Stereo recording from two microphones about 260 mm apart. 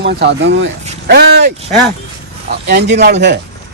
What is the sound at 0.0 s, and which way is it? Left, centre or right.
A man's voice, right.